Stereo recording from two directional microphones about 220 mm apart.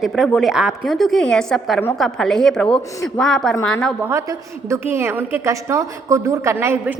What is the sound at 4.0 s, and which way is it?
A woman's voice, 10° right (ahead or behind).